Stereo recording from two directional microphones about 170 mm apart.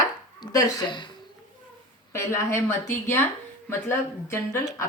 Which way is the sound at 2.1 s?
15° left (ahead or behind).